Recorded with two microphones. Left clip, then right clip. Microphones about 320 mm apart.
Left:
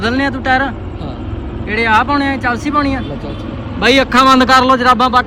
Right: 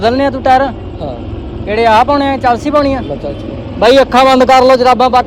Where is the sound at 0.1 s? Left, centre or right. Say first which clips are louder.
Right 4 dB; centre.